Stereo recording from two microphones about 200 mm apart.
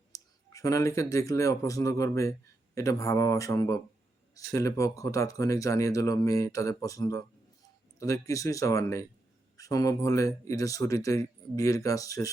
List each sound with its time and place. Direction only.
0.1 s speech: 15° left (ahead or behind)